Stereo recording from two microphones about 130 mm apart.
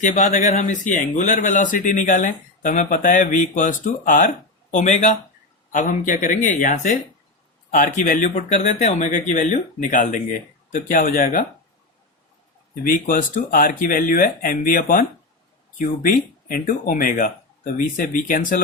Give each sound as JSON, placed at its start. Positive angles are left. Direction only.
{"t": 0.0, "sound": "speech", "side_deg": 70}
{"t": 4.7, "sound": "speech", "side_deg": 70}
{"t": 7.7, "sound": "speech", "side_deg": 85}
{"t": 12.8, "sound": "speech", "side_deg": 90}